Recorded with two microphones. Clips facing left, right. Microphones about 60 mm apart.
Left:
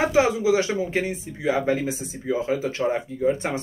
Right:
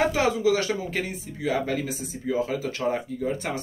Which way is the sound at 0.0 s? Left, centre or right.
Centre.